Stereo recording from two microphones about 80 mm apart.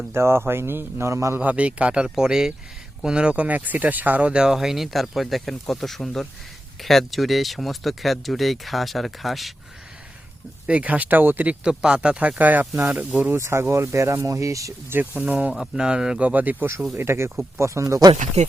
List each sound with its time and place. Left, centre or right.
0.1 s speech: right
1.4 s speech: centre
10.7 s speech: centre
11.6 s speech: centre
13.3 s speech: right
14.8 s speech: right
15.5 s speech: centre; by 18.0 s right